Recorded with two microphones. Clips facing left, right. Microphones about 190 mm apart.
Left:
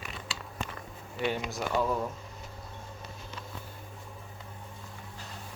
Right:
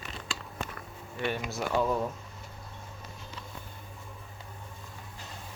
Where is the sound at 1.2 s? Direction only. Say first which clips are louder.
Left 1 dB; 15° left (ahead or behind).